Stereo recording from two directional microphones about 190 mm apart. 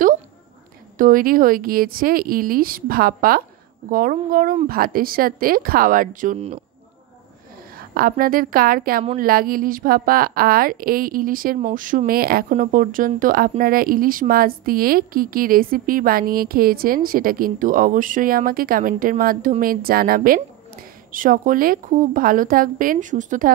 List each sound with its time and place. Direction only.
0.9 s speech: 45° right (ahead or behind)
6.3 s speech: 35° right (ahead or behind)
7.9 s speech: 50° right (ahead or behind)